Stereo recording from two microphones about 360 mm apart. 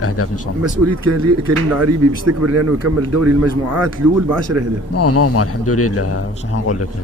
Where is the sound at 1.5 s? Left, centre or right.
Right.